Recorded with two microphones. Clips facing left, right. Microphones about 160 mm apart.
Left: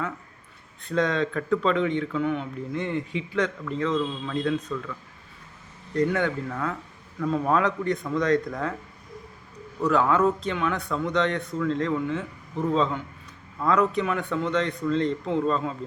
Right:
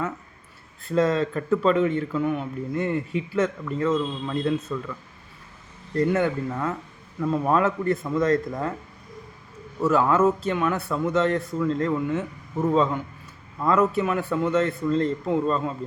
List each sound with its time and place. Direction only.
0.9 s a man's voice: 5° right (ahead or behind)
6.0 s a man's voice: 5° right (ahead or behind)
9.8 s a man's voice: 5° right (ahead or behind)